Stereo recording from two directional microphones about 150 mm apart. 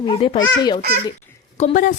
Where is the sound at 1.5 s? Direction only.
50° left (ahead or behind).